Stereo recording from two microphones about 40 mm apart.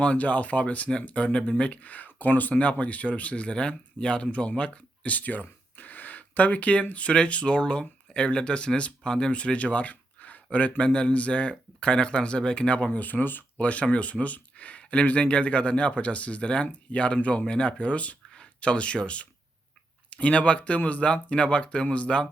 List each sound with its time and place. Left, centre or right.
0.0 s speech: left
1.8 s speech: left
5.1 s speech: left
10.8 s speech: left
13.0 s speech: left
13.6 s speech: left